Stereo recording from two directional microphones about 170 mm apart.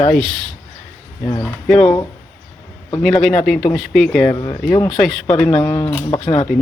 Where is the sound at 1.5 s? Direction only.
5° left (ahead or behind).